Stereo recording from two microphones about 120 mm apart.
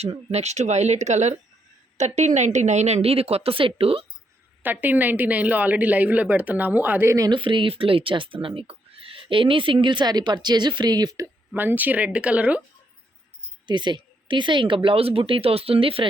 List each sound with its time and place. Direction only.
0.0 s speech: 60° right (ahead or behind)
4.6 s a woman's voice: 15° right (ahead or behind)
7.3 s speech: 40° right (ahead or behind)
11.5 s a woman's voice: 15° right (ahead or behind)
13.7 s speech: 40° right (ahead or behind)